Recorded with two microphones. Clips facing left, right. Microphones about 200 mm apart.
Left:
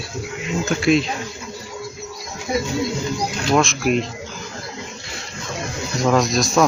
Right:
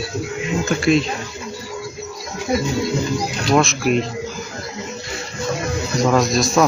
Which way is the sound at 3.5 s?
Centre (ahead or behind).